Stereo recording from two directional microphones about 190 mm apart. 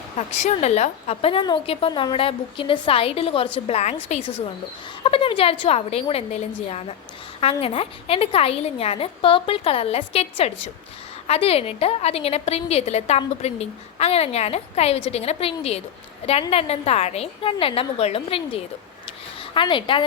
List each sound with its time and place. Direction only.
0.3 s a woman's voice: 35° left (ahead or behind)
5.0 s a woman's voice: 30° left (ahead or behind)
19.0 s a sound: 25° left (ahead or behind)